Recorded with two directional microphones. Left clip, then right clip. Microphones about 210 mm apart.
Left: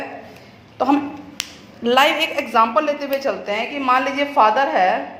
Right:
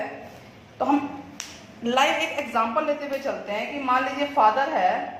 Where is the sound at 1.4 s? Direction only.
45° left (ahead or behind).